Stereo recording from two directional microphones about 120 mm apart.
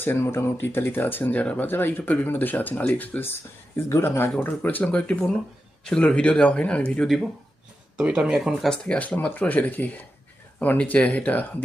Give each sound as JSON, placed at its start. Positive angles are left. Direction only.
{"t": 0.0, "sound": "speech", "side_deg": 20}
{"t": 7.9, "sound": "speech", "side_deg": -10}